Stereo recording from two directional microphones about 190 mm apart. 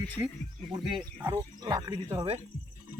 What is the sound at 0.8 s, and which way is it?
Speech, 25° right (ahead or behind).